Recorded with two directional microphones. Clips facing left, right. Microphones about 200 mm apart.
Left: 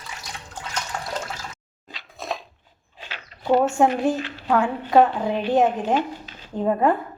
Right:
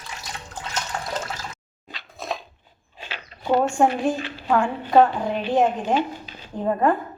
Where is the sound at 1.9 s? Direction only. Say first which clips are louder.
Even; centre (ahead or behind).